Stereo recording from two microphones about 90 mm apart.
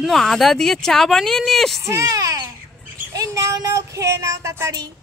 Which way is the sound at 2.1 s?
45° right (ahead or behind).